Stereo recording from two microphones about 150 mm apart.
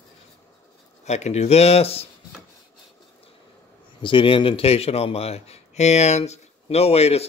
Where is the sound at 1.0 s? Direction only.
50° left (ahead or behind).